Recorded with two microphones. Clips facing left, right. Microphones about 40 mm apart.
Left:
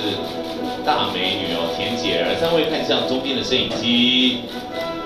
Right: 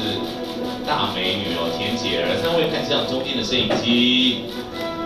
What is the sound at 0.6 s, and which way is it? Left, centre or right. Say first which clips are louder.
Music: left 3 dB; left.